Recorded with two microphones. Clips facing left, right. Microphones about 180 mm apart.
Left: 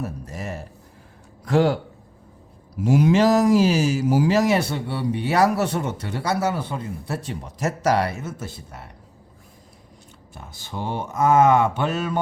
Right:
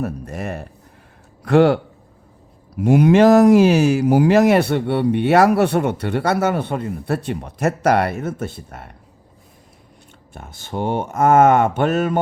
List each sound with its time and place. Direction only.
0.0 s speech: 60° right (ahead or behind)
10.3 s speech: 55° right (ahead or behind)